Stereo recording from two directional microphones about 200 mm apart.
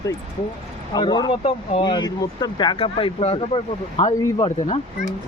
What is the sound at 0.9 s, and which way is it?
Speech, 20° left (ahead or behind).